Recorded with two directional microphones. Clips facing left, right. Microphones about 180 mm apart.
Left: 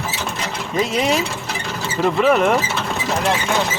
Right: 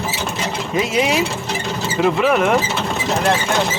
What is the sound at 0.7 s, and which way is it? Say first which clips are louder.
Speech: right 1 dB; centre (ahead or behind).